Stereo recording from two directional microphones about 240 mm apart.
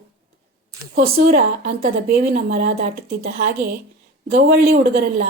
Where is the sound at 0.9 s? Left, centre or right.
Right.